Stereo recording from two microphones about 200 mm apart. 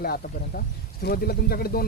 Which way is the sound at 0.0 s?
50° left (ahead or behind).